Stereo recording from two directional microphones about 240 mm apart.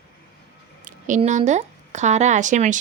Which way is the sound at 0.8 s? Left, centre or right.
Right.